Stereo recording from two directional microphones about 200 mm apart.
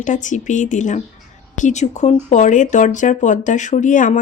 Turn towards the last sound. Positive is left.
turn(degrees=40)  # may be behind; listen again after turning